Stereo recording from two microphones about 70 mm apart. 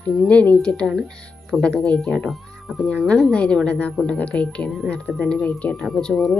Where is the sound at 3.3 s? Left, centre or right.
Centre.